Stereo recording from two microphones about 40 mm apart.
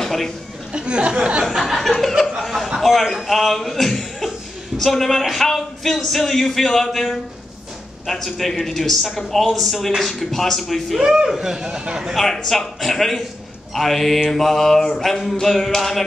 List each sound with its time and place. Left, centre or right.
0.0 s a sound: centre
0.7 s speech: right
1.4 s a man's voice: centre
11.2 s speech: centre
12.1 s a man's voice: centre